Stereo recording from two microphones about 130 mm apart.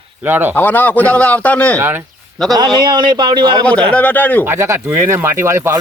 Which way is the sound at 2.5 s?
35° right (ahead or behind).